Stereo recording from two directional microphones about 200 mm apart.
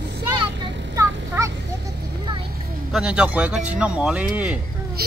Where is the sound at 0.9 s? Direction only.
15° right (ahead or behind).